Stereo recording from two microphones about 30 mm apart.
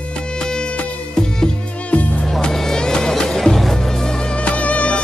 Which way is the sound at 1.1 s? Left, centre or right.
Left.